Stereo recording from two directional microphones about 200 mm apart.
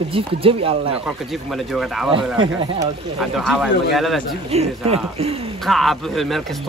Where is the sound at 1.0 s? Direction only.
Centre (ahead or behind).